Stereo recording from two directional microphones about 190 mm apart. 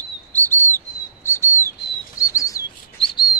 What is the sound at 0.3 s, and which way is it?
Bird, 10° left (ahead or behind).